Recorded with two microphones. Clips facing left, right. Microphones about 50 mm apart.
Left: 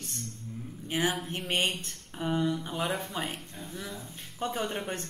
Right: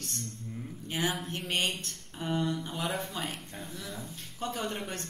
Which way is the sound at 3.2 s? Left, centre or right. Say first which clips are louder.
Left 2 dB; centre.